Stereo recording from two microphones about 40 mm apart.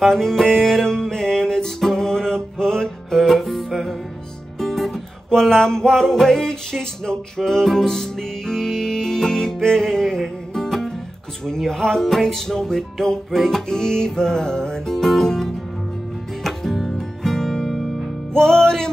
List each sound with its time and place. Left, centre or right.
0.0 s music: centre
18.3 s music: centre